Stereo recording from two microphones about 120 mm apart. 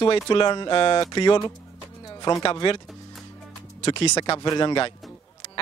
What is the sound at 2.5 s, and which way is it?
Speech, 45° left (ahead or behind).